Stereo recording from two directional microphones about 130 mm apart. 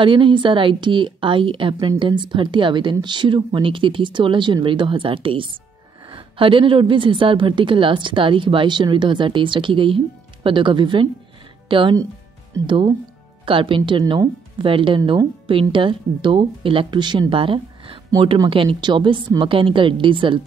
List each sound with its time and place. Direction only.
0.0 s a woman's voice: 40° right (ahead or behind)